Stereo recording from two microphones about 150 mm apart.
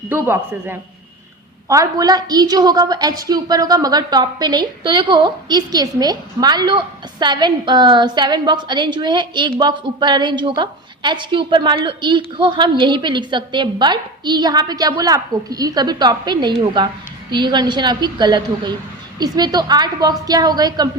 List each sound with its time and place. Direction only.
0.1 s a man's voice: 15° right (ahead or behind)